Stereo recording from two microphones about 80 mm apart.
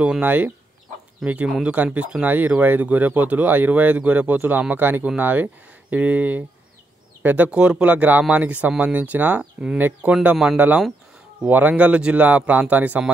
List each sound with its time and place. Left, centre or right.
0.2 s speech: right
2.2 s speech: right
9.8 s speech: right
10.3 s speech: centre
11.4 s speech: right